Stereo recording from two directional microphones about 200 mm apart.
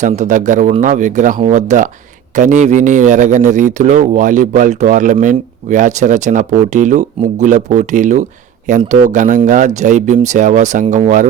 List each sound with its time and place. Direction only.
0.0 s speech: 40° right (ahead or behind)